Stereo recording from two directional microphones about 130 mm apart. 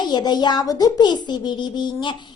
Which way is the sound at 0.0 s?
35° left (ahead or behind).